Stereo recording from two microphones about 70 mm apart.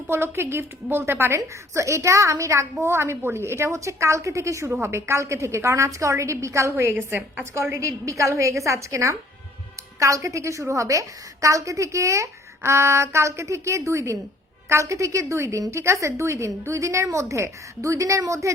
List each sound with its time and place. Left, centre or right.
0.1 s a woman's voice: right
1.4 s a woman's voice: right
7.5 s a woman's voice: right